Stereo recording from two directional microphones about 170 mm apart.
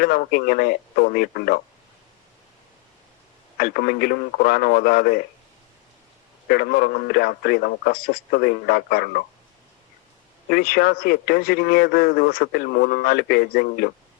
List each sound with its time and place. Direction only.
0.0 s speech: 65° left (ahead or behind)
3.6 s speech: 65° left (ahead or behind)
6.5 s speech: 65° left (ahead or behind)
10.5 s speech: 60° left (ahead or behind)